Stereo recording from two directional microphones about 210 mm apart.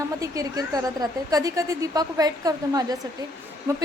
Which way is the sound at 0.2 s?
15° right (ahead or behind).